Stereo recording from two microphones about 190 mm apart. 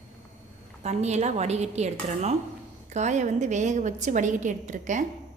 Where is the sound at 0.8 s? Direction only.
35° right (ahead or behind).